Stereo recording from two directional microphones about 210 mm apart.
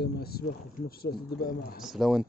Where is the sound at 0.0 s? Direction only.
45° left (ahead or behind).